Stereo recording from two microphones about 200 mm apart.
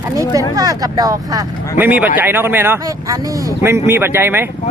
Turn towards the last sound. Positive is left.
turn(degrees=-10)  # may be behind; listen again after turning